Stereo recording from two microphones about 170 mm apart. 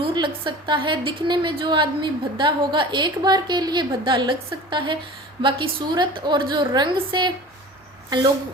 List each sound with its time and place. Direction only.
0.0 s a woman's voice: 30° right (ahead or behind)